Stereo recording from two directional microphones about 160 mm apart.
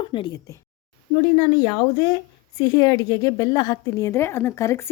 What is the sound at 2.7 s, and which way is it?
A woman's voice, 20° left (ahead or behind).